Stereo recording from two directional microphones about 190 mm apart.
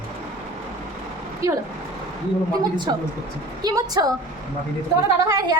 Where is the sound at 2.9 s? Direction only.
20° right (ahead or behind).